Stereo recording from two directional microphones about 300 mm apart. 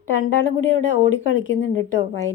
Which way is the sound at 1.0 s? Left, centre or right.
Left.